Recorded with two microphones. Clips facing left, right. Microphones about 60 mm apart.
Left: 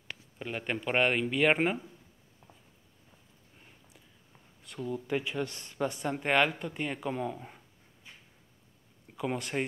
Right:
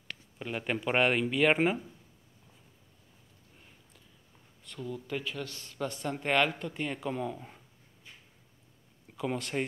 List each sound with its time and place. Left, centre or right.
0.4 s speech: centre
4.7 s speech: centre
9.1 s speech: centre